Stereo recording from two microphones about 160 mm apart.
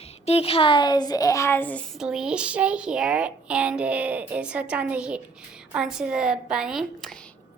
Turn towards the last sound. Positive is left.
turn(degrees=0)  # may be behind; listen again after turning